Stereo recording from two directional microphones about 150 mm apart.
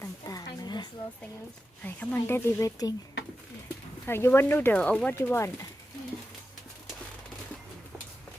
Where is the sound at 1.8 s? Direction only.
10° left (ahead or behind).